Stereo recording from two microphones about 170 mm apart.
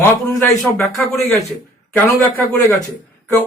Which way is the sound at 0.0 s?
15° left (ahead or behind).